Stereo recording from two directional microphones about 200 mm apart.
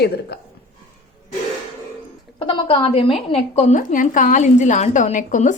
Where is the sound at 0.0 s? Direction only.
55° left (ahead or behind).